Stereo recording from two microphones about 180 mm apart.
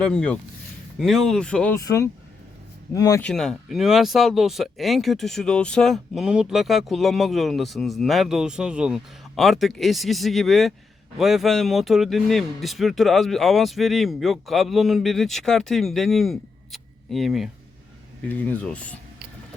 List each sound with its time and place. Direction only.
0.0 s speech: 5° left (ahead or behind)
2.9 s speech: 20° left (ahead or behind)
3.2 s speech: 5° left (ahead or behind)